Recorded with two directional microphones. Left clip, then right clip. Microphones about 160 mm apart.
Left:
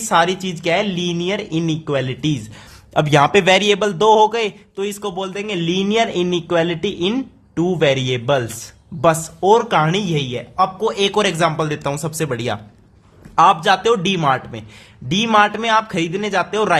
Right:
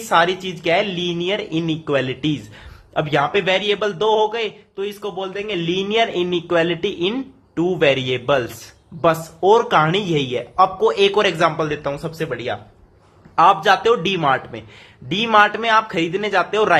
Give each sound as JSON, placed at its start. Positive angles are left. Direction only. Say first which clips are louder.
{"t": 0.1, "sound": "speech", "louder": "even", "side_deg": 30}
{"t": 2.9, "sound": "a man's voice", "louder": "left 5 dB", "side_deg": 45}
{"t": 9.4, "sound": "speech", "louder": "even", "side_deg": 20}
{"t": 13.3, "sound": "speech", "louder": "left 1 dB", "side_deg": 25}